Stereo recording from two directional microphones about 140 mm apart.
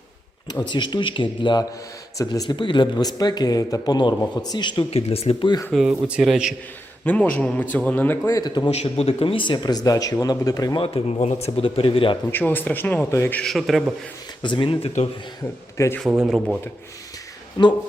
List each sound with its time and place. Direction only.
0.7 s speech: 35° left (ahead or behind)
4.9 s a man's voice: 45° left (ahead or behind)
5.7 s a man's voice: 5° right (ahead or behind)
7.0 s a man's voice: 10° left (ahead or behind)
8.4 s speech: 30° left (ahead or behind)
8.7 s speech: 45° left (ahead or behind); by 10.8 s 25° left (ahead or behind)
10.8 s a man's voice: 45° left (ahead or behind)
12.3 s a man's voice: 15° left (ahead or behind)
13.4 s a man's voice: centre (ahead or behind)
14.4 s speech: 35° left (ahead or behind)
15.4 s a man's voice: 20° left (ahead or behind)
16.0 s speech: 5° right (ahead or behind)
17.6 s speech: 30° left (ahead or behind)